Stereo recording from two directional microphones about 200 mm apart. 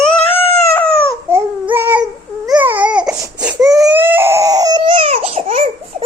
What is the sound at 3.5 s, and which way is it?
Baby cry, 20° right (ahead or behind).